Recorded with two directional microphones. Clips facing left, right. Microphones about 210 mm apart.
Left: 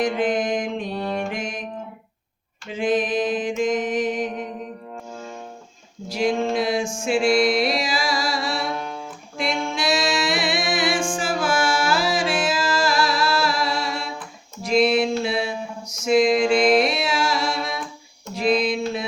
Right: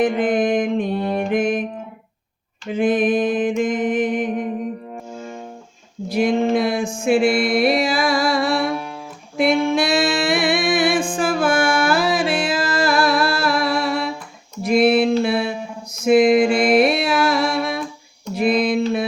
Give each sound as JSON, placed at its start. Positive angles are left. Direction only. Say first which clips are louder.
{"t": 0.0, "sound": "music", "louder": "right 4 dB", "side_deg": -55}
{"t": 2.6, "sound": "music", "louder": "right 5 dB", "side_deg": -55}
{"t": 6.1, "sound": "a sound", "louder": "right 3 dB", "side_deg": -55}
{"t": 6.6, "sound": "music", "louder": "right 2 dB", "side_deg": -60}
{"t": 16.3, "sound": "mantra", "louder": "right 2 dB", "side_deg": -5}
{"t": 16.7, "sound": "carnatic music", "louder": "right 4 dB", "side_deg": -55}
{"t": 18.3, "sound": "a sound", "louder": "right 3 dB", "side_deg": -55}